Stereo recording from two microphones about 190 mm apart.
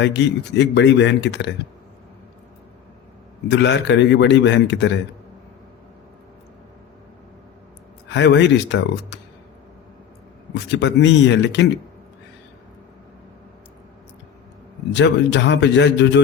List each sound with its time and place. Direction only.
0.0 s speech: 65° left (ahead or behind)
3.5 s speech: 65° left (ahead or behind)
8.0 s speech: 70° left (ahead or behind)
10.5 s speech: 65° left (ahead or behind)
14.9 s speech: 70° left (ahead or behind)